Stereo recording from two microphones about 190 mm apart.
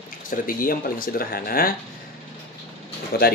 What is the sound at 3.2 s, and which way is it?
Speech, 55° left (ahead or behind).